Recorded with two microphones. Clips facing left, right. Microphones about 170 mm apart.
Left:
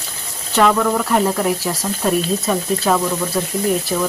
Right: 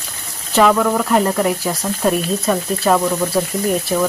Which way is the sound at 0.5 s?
Centre (ahead or behind).